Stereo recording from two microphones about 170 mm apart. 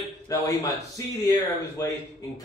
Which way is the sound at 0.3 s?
20° left (ahead or behind).